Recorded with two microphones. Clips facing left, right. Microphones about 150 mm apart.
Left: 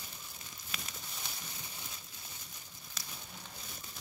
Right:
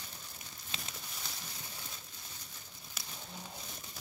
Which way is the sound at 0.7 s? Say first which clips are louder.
Even; 25° right (ahead or behind).